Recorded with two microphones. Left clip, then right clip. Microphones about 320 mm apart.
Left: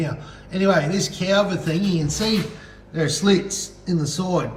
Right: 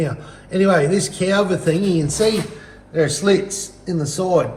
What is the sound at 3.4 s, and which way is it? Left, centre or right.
Speech, left.